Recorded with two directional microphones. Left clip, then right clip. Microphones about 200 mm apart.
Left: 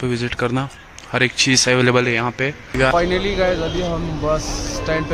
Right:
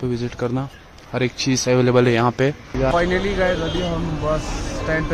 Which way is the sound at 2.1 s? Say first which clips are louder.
Right 2 dB; 25° right (ahead or behind).